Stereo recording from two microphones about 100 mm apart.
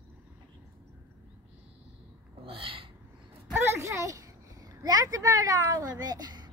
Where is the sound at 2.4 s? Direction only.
65° right (ahead or behind).